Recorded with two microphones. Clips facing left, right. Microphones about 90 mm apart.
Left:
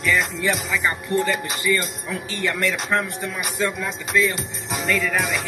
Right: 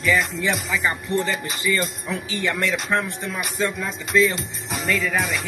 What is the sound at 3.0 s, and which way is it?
Speech, centre (ahead or behind).